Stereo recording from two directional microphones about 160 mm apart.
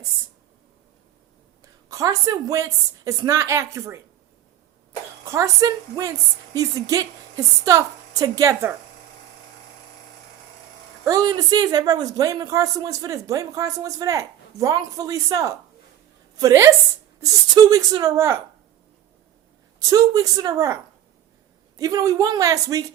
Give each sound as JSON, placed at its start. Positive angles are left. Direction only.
{"t": 1.6, "sound": "a woman's voice", "side_deg": -20}
{"t": 11.0, "sound": "a woman's voice", "side_deg": -25}
{"t": 19.8, "sound": "a woman's voice", "side_deg": -20}
{"t": 21.8, "sound": "a woman's voice", "side_deg": -20}